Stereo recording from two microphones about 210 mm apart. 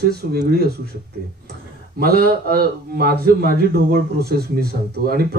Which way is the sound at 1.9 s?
45° right (ahead or behind).